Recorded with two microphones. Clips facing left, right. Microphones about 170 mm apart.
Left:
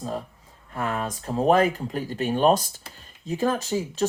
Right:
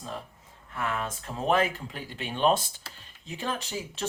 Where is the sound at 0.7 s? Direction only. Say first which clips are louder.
Left 4 dB; 40° left (ahead or behind).